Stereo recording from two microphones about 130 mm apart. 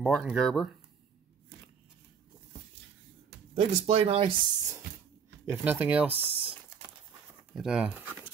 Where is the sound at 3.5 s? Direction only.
50° right (ahead or behind).